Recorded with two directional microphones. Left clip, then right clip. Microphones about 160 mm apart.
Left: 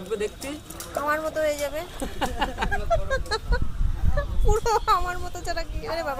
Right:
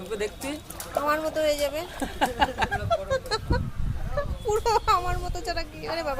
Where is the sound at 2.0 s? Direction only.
30° right (ahead or behind).